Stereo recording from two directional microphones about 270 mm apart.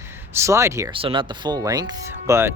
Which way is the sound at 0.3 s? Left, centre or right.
Centre.